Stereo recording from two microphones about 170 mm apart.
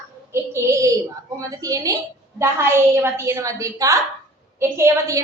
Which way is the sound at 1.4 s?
20° right (ahead or behind).